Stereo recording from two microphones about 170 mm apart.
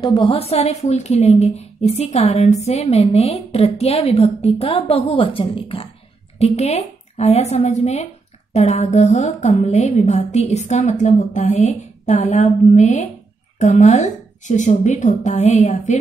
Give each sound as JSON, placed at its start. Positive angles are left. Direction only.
{"t": 0.0, "sound": "a woman's voice", "side_deg": 25}